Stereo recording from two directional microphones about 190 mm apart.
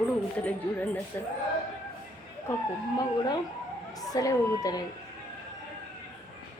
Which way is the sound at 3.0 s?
20° left (ahead or behind).